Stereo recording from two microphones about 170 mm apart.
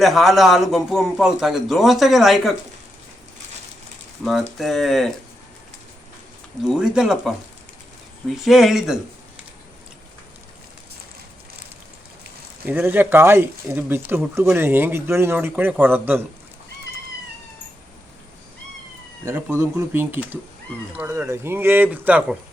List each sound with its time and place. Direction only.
0.0 s a man's voice: centre (ahead or behind)
4.2 s a man's voice: centre (ahead or behind)
6.7 s a man's voice: 5° right (ahead or behind)
8.4 s a man's voice: centre (ahead or behind)
12.6 s a man's voice: 10° right (ahead or behind)
19.2 s a man's voice: 15° right (ahead or behind)